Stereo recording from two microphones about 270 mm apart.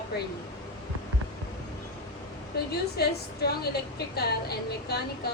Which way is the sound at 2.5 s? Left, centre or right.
Left.